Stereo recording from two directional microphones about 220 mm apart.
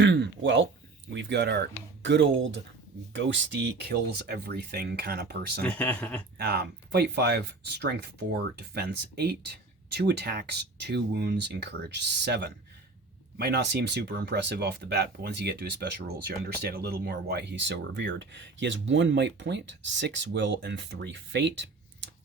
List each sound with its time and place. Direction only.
0.0 s speech: 55° right (ahead or behind)
5.6 s speech: 5° left (ahead or behind)
6.3 s speech: 50° right (ahead or behind)